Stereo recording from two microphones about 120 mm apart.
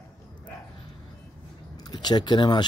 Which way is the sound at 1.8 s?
35° left (ahead or behind).